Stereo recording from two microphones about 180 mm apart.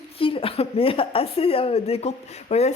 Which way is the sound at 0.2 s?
30° left (ahead or behind).